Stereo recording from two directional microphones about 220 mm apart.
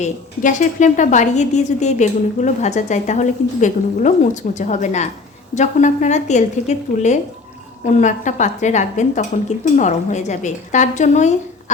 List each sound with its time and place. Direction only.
0.0 s a woman's voice: 35° left (ahead or behind)